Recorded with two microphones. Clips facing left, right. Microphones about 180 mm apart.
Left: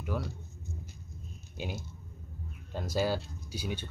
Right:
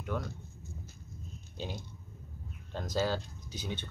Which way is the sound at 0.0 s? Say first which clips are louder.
Left 1 dB; 5° left (ahead or behind).